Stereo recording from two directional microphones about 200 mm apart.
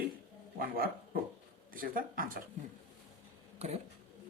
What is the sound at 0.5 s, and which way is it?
A man's voice, 45° right (ahead or behind).